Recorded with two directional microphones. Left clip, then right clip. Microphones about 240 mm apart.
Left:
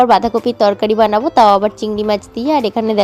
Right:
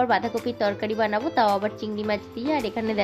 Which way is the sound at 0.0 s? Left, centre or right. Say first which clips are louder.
Left 12 dB; left.